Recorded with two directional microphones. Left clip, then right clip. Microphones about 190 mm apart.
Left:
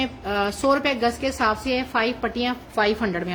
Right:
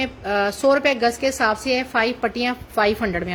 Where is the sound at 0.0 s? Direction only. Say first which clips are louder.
Right 3 dB; 15° right (ahead or behind).